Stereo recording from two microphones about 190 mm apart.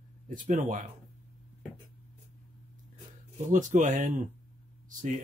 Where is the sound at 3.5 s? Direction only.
40° right (ahead or behind).